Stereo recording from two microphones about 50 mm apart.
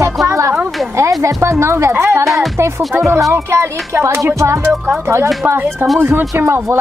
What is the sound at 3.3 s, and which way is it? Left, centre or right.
Speech, right.